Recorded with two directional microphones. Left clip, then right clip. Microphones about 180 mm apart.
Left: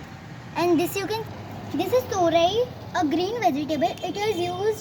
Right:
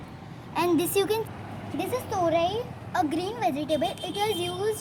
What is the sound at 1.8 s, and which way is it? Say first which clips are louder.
A woman's voice: left 5 dB; 30° right (ahead or behind).